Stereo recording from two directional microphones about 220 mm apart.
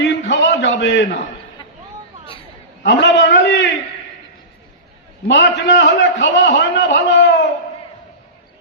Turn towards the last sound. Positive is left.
turn(degrees=55)  # may be behind; listen again after turning